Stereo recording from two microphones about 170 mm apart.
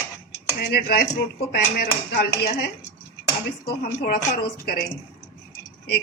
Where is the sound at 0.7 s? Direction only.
65° left (ahead or behind).